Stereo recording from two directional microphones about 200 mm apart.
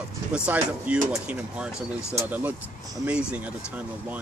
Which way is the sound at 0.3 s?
5° right (ahead or behind).